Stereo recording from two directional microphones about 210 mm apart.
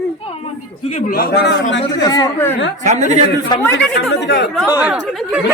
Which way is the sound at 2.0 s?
20° left (ahead or behind).